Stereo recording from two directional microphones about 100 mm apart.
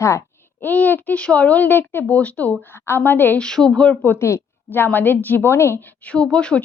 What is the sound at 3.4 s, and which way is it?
Speech, 5° left (ahead or behind).